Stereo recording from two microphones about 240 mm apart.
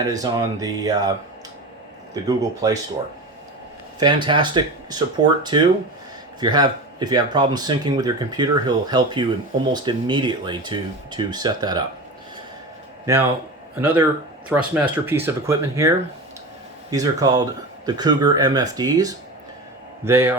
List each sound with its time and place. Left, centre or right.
0.0 s speech: centre
2.1 s speech: centre
4.0 s speech: centre
13.1 s speech: centre
16.9 s speech: centre